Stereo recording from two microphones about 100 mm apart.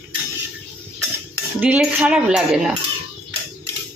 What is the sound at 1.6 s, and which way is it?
Speech, 15° right (ahead or behind).